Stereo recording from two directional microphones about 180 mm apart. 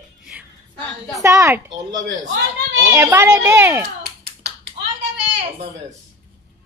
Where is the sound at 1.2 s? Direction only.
15° right (ahead or behind).